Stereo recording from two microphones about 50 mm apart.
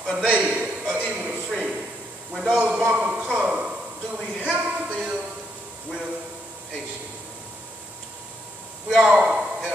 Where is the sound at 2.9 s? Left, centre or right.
Right.